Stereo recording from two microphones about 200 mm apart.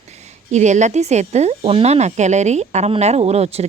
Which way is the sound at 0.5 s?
35° right (ahead or behind).